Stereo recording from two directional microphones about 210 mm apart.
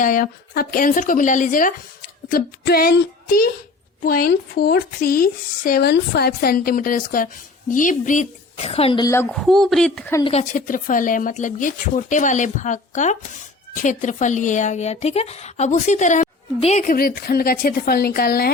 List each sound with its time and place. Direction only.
0.0 s speech: 40° left (ahead or behind)
4.0 s speech: 45° left (ahead or behind); by 9.2 s 15° left (ahead or behind)
9.3 s speech: centre (ahead or behind)
10.2 s a woman's voice: 25° left (ahead or behind)
10.5 s speech: 40° left (ahead or behind)